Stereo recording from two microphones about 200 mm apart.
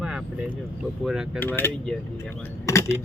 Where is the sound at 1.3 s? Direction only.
10° left (ahead or behind).